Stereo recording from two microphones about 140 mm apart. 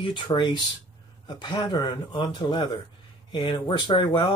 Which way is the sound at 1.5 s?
30° left (ahead or behind).